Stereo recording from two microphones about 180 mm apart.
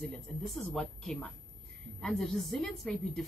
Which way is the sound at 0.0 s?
Centre (ahead or behind).